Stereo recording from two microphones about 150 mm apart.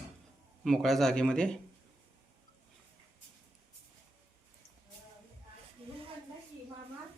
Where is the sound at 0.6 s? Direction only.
Centre (ahead or behind).